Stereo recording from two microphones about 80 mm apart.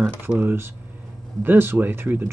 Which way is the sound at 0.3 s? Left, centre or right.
Right.